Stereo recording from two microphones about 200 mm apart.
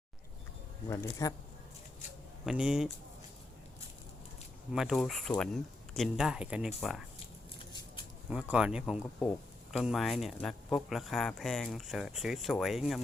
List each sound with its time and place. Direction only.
1.2 s speech: 15° left (ahead or behind)
2.5 s speech: 5° right (ahead or behind)
4.7 s speech: centre (ahead or behind)
8.3 s speech: 5° right (ahead or behind)